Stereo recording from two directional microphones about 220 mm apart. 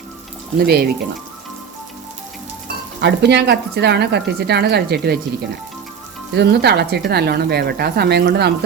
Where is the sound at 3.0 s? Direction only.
50° right (ahead or behind).